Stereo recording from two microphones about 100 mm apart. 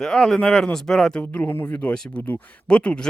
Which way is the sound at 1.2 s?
20° left (ahead or behind).